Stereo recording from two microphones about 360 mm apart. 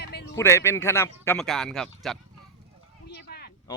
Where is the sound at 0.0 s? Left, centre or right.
Left.